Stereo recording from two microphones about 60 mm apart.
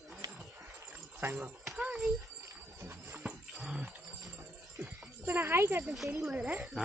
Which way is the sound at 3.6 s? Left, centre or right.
Centre.